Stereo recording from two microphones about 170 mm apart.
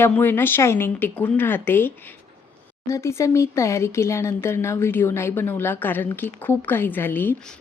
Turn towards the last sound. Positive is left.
turn(degrees=10)  # may be behind; listen again after turning